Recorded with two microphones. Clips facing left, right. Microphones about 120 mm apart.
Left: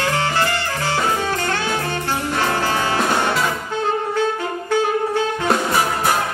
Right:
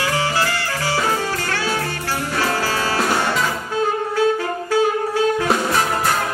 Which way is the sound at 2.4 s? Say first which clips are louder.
Even; 20° left (ahead or behind).